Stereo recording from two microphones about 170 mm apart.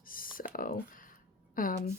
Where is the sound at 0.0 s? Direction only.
55° left (ahead or behind).